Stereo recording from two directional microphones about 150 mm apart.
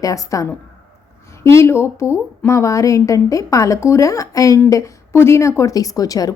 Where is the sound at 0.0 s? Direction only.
20° left (ahead or behind).